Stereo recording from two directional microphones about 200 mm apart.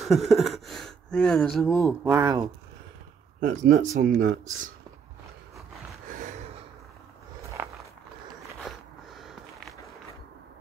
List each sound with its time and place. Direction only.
0.0 s speech: centre (ahead or behind)
1.7 s speech: 10° left (ahead or behind)
2.0 s speech: 10° right (ahead or behind)
3.3 s speech: 40° right (ahead or behind)
6.1 s a sound: 40° right (ahead or behind)
7.4 s walk: 15° right (ahead or behind)
8.6 s walk: centre (ahead or behind)